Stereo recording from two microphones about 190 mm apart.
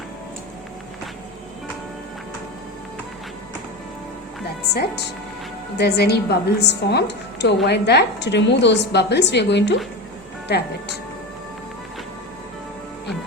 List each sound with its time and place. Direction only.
4.7 s a woman's voice: 55° left (ahead or behind)